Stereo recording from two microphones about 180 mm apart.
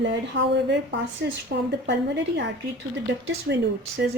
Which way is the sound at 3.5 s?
60° right (ahead or behind).